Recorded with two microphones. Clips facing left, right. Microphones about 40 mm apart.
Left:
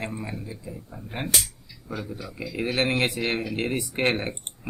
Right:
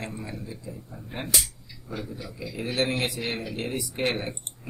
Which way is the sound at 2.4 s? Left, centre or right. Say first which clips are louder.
Left 2 dB; left.